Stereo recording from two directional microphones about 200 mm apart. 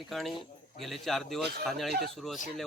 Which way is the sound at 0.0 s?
Centre (ahead or behind).